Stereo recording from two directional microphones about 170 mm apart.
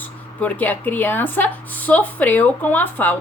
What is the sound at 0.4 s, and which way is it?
A woman's voice, 10° left (ahead or behind).